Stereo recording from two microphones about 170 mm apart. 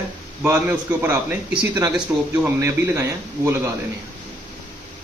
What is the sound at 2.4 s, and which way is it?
Speech, 15° right (ahead or behind).